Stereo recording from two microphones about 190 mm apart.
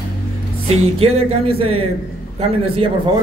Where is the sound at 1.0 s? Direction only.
30° right (ahead or behind).